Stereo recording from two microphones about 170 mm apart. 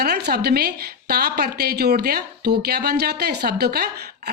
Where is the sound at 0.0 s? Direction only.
70° right (ahead or behind).